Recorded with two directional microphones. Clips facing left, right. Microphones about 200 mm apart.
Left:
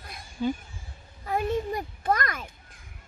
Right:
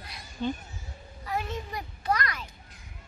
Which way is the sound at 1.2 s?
50° left (ahead or behind).